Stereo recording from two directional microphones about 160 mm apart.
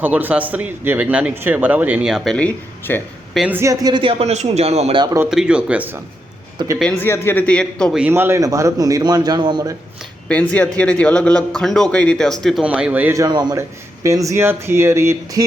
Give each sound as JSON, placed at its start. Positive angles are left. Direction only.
{"t": 0.0, "sound": "a man's voice", "side_deg": -10}
{"t": 3.3, "sound": "speech", "side_deg": -5}
{"t": 3.6, "sound": "a man's voice", "side_deg": -20}
{"t": 4.2, "sound": "speech", "side_deg": -45}
{"t": 4.9, "sound": "a man's voice", "side_deg": -25}
{"t": 5.3, "sound": "a man's voice", "side_deg": -5}
{"t": 7.0, "sound": "a man's voice", "side_deg": 15}
{"t": 7.9, "sound": "a man's voice", "side_deg": -10}
{"t": 10.5, "sound": "speech", "side_deg": 10}
{"t": 13.2, "sound": "a man's voice", "side_deg": -25}